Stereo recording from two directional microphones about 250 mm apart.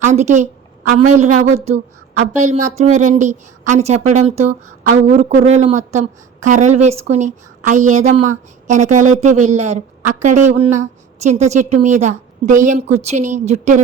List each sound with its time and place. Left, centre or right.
0.0 s a woman's voice: right